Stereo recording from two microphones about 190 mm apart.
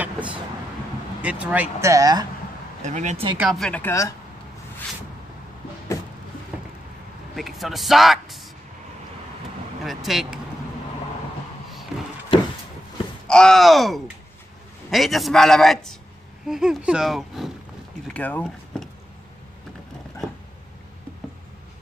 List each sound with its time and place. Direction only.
0.0 s vehicle: 5° right (ahead or behind)
1.2 s speech: 10° right (ahead or behind)
2.8 s speech: 40° right (ahead or behind)
3.3 s a man's voice: centre (ahead or behind)
6.5 s a sound: 5° right (ahead or behind)
7.3 s speech: centre (ahead or behind)
9.8 s speech: centre (ahead or behind)
13.3 s a man's voice: 5° left (ahead or behind)